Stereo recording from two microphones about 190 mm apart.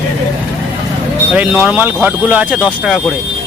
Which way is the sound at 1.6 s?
10° right (ahead or behind).